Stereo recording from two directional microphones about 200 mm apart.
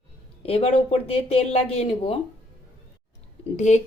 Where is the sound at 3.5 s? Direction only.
35° left (ahead or behind).